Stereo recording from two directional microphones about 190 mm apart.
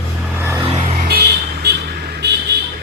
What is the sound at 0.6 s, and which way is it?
Music, 30° right (ahead or behind).